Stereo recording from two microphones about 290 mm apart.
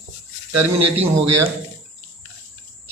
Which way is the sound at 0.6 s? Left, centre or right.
Right.